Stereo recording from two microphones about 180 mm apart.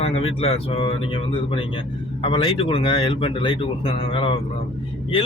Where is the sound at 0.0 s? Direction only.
35° left (ahead or behind).